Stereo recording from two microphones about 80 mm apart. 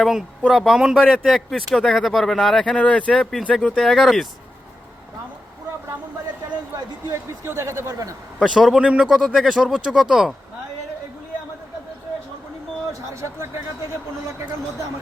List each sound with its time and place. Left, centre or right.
0.0 s speech: centre
2.7 s speech: centre
7.1 s speech: right
8.4 s speech: centre
8.8 s speech: centre
9.0 s speech: centre
9.4 s speech: centre
12.9 s a sound: right